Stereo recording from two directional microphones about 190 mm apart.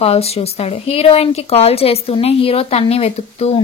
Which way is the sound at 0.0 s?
30° left (ahead or behind).